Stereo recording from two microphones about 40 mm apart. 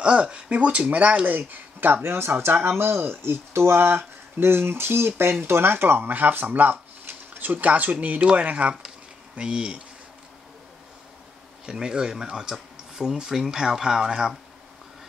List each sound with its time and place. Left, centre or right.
0.0 s speech: right
1.2 s speech: right
2.0 s speech: right
11.6 s speech: centre